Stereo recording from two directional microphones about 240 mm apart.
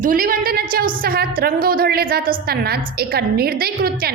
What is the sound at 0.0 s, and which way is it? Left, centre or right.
A woman's voice, right.